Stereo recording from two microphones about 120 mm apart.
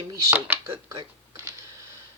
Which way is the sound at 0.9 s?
30° right (ahead or behind).